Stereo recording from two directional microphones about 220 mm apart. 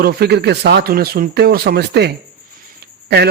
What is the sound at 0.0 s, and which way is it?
A man's voice, 45° right (ahead or behind).